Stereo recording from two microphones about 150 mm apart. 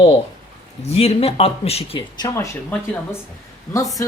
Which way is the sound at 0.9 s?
45° left (ahead or behind).